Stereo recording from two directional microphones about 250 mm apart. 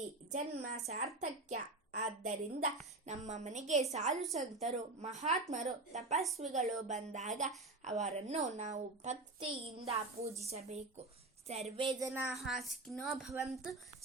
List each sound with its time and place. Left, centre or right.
0.3 s a woman's voice: right; by 12.2 s centre
12.3 s speech: centre